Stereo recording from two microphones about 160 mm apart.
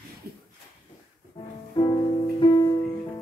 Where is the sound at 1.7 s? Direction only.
30° left (ahead or behind).